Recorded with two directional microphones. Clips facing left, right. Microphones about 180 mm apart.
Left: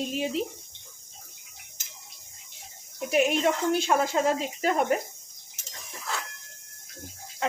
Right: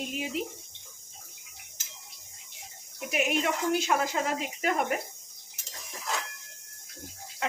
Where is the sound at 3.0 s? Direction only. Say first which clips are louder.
Left 5 dB; 30° left (ahead or behind).